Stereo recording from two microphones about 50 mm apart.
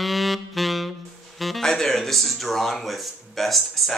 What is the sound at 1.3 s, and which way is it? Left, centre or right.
Speech, centre.